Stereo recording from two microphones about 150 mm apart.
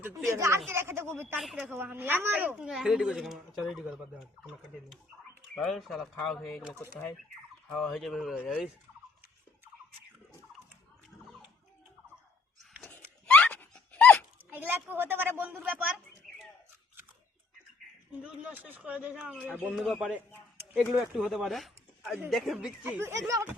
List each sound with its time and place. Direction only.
0.0 s a woman's voice: 20° right (ahead or behind)
1.4 s speech: centre (ahead or behind)
1.6 s speech: 10° right (ahead or behind)
5.5 s speech: centre (ahead or behind)
7.7 s speech: centre (ahead or behind)
13.2 s a sound: 10° left (ahead or behind)
14.5 s a woman's voice: 10° right (ahead or behind)
18.2 s a woman's voice: 10° right (ahead or behind)